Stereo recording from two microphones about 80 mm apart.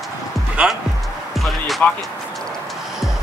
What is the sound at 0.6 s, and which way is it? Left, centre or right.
Speech, centre.